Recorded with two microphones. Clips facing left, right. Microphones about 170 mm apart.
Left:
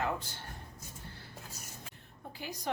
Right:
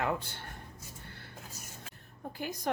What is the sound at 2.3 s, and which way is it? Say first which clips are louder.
Speech: right 4 dB; 50° right (ahead or behind).